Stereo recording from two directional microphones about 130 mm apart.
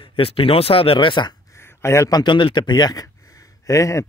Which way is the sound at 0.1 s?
45° left (ahead or behind).